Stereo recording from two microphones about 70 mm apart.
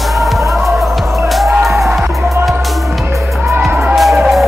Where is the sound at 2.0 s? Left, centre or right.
Right.